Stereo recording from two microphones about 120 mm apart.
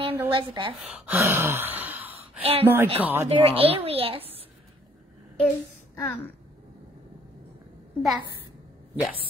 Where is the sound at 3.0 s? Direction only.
20° right (ahead or behind).